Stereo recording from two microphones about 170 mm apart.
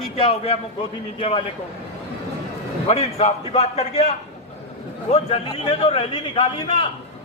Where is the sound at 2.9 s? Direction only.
40° left (ahead or behind).